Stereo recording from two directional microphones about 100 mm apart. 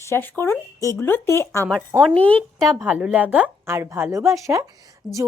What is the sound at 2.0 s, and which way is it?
Speech, 15° left (ahead or behind).